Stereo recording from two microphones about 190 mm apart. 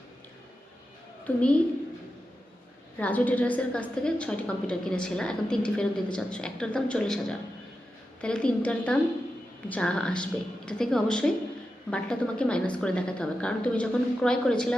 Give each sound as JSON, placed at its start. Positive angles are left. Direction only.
{"t": 1.4, "sound": "a woman's voice", "side_deg": 5}
{"t": 3.0, "sound": "a woman's voice", "side_deg": 10}